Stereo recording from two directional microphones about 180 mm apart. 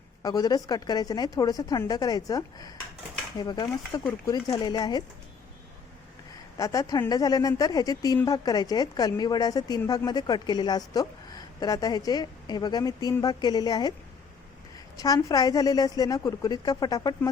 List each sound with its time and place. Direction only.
0.2 s speech: 20° left (ahead or behind)
6.6 s speech: 20° left (ahead or behind)
14.9 s speech: 20° left (ahead or behind)